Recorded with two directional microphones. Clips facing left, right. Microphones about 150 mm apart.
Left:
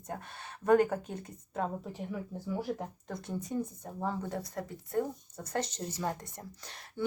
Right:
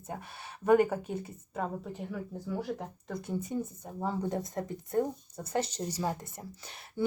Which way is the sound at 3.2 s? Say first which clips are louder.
Right 1 dB; 10° right (ahead or behind).